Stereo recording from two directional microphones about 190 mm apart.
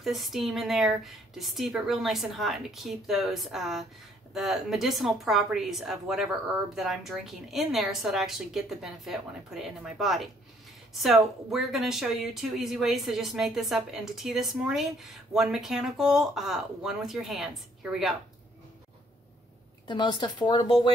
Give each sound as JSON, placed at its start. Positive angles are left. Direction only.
{"t": 0.0, "sound": "speech", "side_deg": 0}
{"t": 19.9, "sound": "speech", "side_deg": 25}